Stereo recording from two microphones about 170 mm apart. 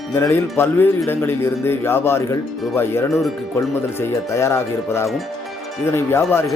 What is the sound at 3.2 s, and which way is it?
Speech, centre (ahead or behind).